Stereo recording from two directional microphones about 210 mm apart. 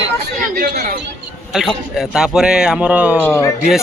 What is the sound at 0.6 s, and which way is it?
Speech, 50° right (ahead or behind).